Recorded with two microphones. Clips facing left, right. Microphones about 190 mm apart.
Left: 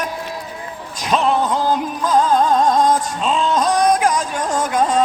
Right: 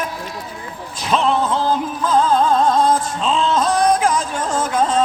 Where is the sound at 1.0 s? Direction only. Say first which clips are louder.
Even; 10° left (ahead or behind).